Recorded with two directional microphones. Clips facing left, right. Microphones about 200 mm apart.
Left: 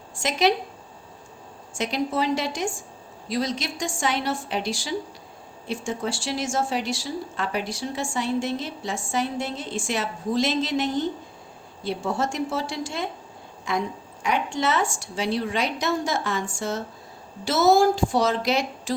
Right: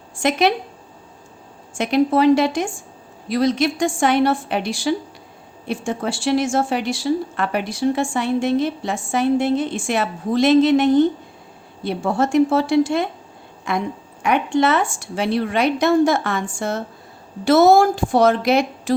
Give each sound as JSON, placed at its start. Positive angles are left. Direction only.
{"t": 0.2, "sound": "a woman's voice", "side_deg": -60}
{"t": 1.7, "sound": "a woman's voice", "side_deg": -60}